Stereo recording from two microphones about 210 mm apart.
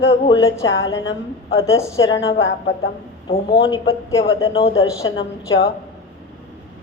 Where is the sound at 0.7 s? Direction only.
60° left (ahead or behind).